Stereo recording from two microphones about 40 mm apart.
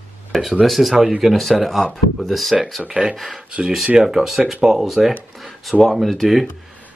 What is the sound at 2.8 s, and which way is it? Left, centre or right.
Speech, centre.